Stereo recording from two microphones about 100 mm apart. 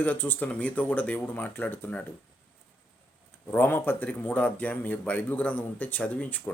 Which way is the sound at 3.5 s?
20° left (ahead or behind).